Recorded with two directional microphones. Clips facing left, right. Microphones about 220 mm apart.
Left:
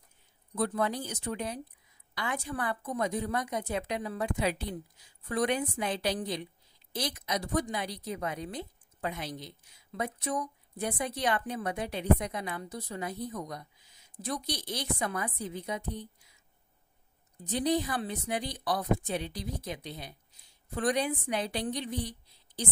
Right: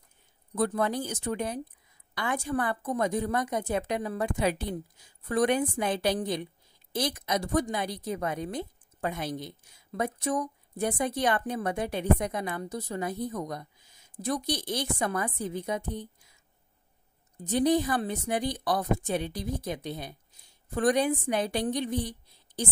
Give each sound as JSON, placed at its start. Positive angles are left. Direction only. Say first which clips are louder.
{"t": 0.6, "sound": "a woman's voice", "louder": "right 3 dB", "side_deg": -50}
{"t": 17.4, "sound": "a woman's voice", "louder": "right 5 dB", "side_deg": -50}